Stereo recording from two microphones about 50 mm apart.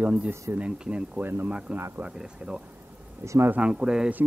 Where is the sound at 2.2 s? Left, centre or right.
Centre.